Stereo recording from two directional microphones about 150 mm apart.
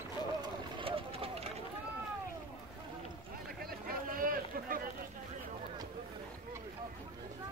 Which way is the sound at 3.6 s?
75° right (ahead or behind).